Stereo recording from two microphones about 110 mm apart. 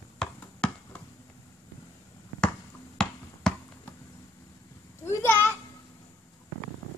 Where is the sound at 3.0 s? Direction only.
5° left (ahead or behind).